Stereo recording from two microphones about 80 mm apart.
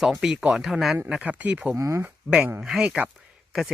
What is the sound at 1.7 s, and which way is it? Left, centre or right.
Speech, right.